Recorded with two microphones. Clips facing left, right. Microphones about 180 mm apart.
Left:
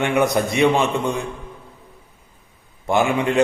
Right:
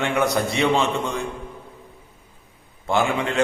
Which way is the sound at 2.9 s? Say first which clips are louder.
Left 3 dB; 15° left (ahead or behind).